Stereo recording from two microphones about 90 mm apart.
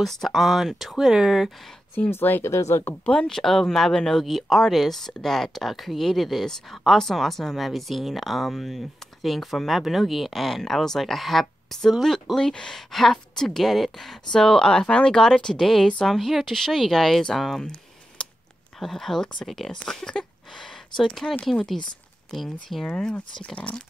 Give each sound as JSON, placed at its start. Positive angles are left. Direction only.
{"t": 0.0, "sound": "speech", "side_deg": 0}
{"t": 2.0, "sound": "speech", "side_deg": 25}
{"t": 3.1, "sound": "speech", "side_deg": 5}